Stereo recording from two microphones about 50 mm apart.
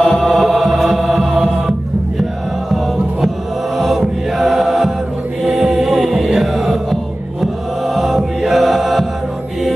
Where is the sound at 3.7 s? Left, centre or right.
Centre.